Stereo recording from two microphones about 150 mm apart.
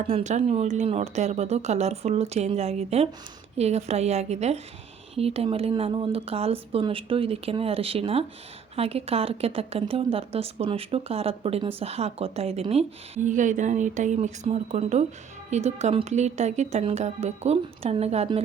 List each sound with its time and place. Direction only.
0.1 s a woman's voice: 50° right (ahead or behind)
13.2 s a woman's voice: 55° right (ahead or behind)